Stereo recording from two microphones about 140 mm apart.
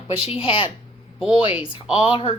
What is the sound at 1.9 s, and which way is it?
Speech, 40° left (ahead or behind).